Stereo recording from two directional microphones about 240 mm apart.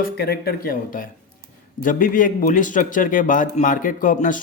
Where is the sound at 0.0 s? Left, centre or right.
Left.